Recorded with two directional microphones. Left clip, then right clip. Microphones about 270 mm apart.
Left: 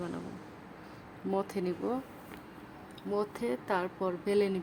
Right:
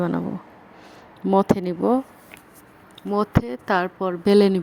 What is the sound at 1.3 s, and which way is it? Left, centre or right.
Speech, right.